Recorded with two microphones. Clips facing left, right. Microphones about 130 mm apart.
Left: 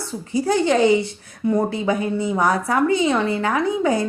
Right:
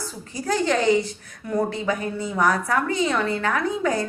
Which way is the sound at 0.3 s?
30° left (ahead or behind).